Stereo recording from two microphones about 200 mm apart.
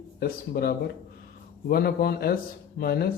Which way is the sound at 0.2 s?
50° left (ahead or behind).